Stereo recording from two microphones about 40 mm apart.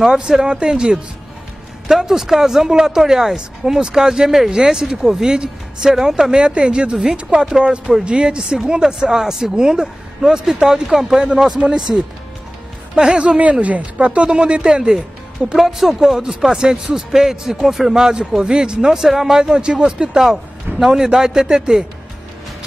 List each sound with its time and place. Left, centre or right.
0.1 s speech: centre
18.9 s speech: centre
19.5 s speech: right
20.8 s speech: centre